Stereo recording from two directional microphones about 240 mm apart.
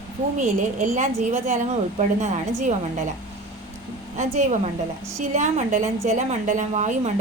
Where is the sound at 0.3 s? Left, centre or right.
Right.